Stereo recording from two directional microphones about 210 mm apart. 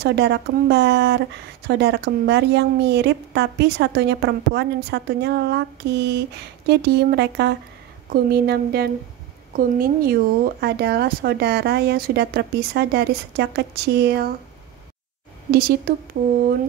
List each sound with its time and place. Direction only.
0.0 s a woman's voice: 55° right (ahead or behind)
15.5 s a woman's voice: 45° right (ahead or behind)